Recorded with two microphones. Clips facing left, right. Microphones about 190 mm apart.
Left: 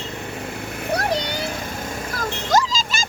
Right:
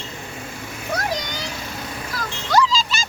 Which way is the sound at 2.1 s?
45° left (ahead or behind).